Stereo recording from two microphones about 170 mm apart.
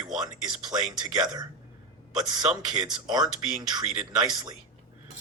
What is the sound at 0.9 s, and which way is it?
Speech, 25° right (ahead or behind).